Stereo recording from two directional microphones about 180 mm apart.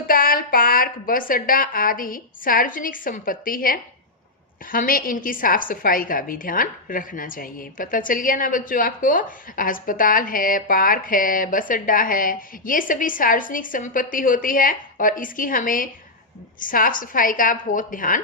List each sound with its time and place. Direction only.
0.1 s a woman's voice: 50° left (ahead or behind)